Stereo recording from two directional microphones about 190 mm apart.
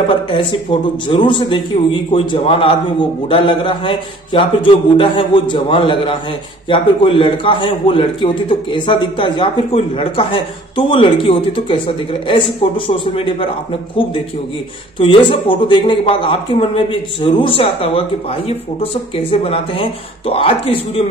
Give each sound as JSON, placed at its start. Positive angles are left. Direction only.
{"t": 0.3, "sound": "speech", "side_deg": 25}
{"t": 15.0, "sound": "speech", "side_deg": 25}